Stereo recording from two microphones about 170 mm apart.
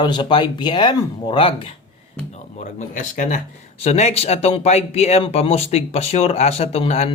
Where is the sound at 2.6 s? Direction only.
45° left (ahead or behind).